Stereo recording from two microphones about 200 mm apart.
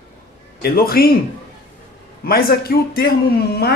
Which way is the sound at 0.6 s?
50° left (ahead or behind).